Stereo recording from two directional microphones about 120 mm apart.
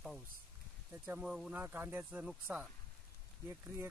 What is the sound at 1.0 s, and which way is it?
Speech, 15° right (ahead or behind).